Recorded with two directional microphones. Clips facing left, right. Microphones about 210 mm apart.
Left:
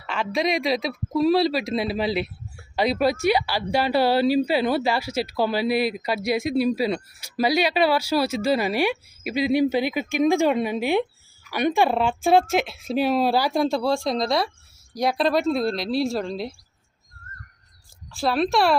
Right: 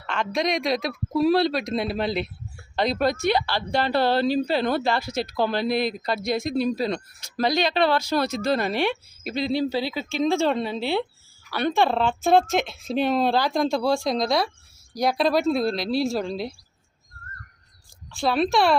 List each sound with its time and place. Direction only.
0.0 s speech: 5° left (ahead or behind)
18.1 s speech: centre (ahead or behind)